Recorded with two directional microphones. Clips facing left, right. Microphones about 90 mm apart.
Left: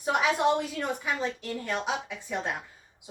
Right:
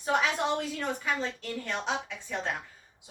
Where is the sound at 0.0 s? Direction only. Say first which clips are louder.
Left 3 dB; 10° left (ahead or behind).